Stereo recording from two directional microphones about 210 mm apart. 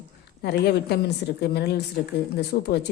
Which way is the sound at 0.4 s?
50° left (ahead or behind).